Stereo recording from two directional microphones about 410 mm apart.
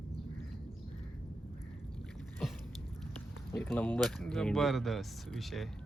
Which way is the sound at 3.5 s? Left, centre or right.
Centre.